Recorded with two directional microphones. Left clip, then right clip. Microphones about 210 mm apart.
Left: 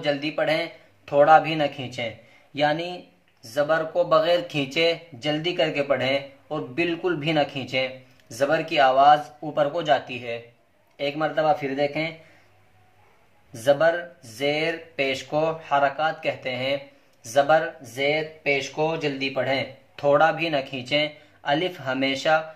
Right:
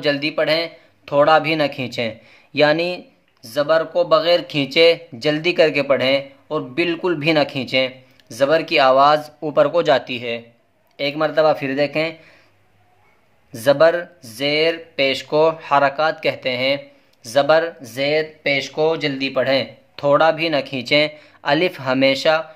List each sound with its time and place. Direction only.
0.0 s speech: 40° right (ahead or behind)
3.4 s speech: 35° right (ahead or behind); by 12.1 s 50° right (ahead or behind)
13.5 s speech: 45° right (ahead or behind)
20.0 s speech: 30° right (ahead or behind)